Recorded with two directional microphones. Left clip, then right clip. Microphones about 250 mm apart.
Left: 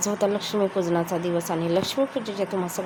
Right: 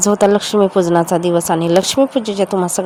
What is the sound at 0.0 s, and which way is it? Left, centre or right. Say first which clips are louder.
Speech: right 12 dB; right.